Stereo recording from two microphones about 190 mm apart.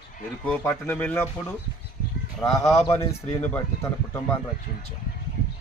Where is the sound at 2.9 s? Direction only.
10° left (ahead or behind).